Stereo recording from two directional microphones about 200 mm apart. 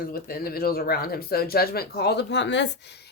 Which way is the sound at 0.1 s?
50° left (ahead or behind).